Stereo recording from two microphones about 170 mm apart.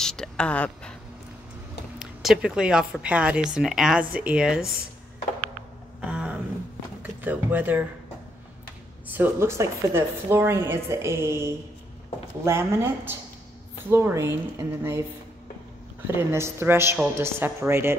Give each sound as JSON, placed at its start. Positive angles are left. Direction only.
{"t": 0.0, "sound": "a sound", "side_deg": 5}
{"t": 2.0, "sound": "a woman's voice", "side_deg": -5}
{"t": 5.9, "sound": "a sound", "side_deg": -5}
{"t": 7.0, "sound": "speech", "side_deg": -10}
{"t": 9.0, "sound": "a woman's voice", "side_deg": -10}
{"t": 16.1, "sound": "a woman's voice", "side_deg": -15}